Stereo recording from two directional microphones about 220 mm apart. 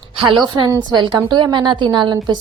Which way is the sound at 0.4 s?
20° right (ahead or behind).